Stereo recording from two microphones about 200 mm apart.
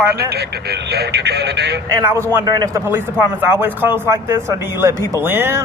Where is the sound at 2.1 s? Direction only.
15° right (ahead or behind).